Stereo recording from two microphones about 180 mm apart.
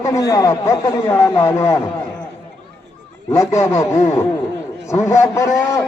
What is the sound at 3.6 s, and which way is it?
Speech, 15° left (ahead or behind).